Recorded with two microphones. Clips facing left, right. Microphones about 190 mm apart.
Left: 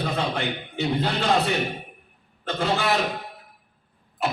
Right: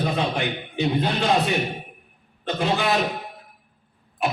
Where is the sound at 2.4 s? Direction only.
15° right (ahead or behind).